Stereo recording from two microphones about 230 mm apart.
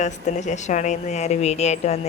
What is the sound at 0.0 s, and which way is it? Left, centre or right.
A woman's voice, left.